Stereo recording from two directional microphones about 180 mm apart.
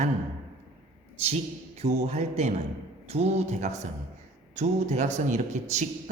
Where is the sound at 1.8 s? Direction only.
35° right (ahead or behind).